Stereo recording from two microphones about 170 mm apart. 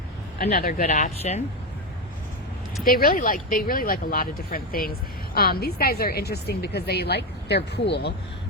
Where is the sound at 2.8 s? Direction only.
60° left (ahead or behind).